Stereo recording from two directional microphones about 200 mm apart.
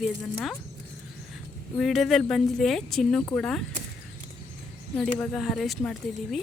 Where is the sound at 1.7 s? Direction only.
Centre (ahead or behind).